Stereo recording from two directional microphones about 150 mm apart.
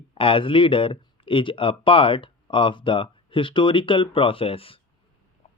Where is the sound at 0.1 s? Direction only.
35° left (ahead or behind).